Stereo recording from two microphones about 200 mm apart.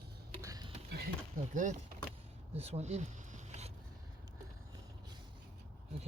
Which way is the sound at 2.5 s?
30° right (ahead or behind).